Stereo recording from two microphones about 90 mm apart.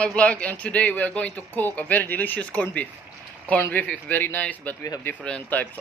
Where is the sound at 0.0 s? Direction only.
15° left (ahead or behind).